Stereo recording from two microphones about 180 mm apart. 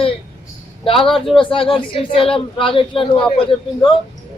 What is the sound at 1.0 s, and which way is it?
Speech, 30° left (ahead or behind).